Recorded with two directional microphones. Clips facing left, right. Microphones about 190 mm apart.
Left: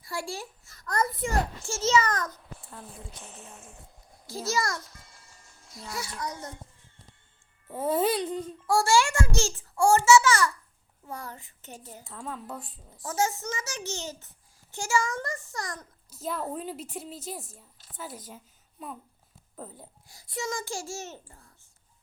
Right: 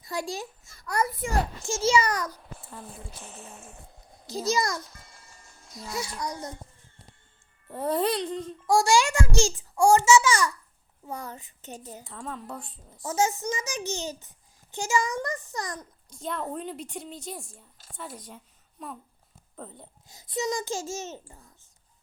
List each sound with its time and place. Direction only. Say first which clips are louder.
0.0 s a child's voice: right 3 dB; 20° right (ahead or behind); by 3.2 s centre (ahead or behind)
3.3 s speech: right 2 dB; 55° right (ahead or behind)
4.3 s a child's voice: right 3 dB; 20° right (ahead or behind)
4.9 s music: right 2 dB; 50° right (ahead or behind)
5.9 s a child's voice: right 3 dB; 20° right (ahead or behind)
7.7 s a woman's voice: even; centre (ahead or behind)
8.6 s a child's voice: right 2 dB; 15° right (ahead or behind)
12.0 s a woman's voice: left 1 dB; centre (ahead or behind)
13.1 s a child's voice: right 3 dB; 20° right (ahead or behind)
16.0 s a woman's voice: even; 5° left (ahead or behind)
20.1 s a child's voice: right 5 dB; 20° right (ahead or behind)